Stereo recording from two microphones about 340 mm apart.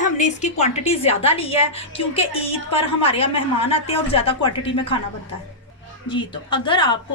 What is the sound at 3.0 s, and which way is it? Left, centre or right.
A woman's voice, centre.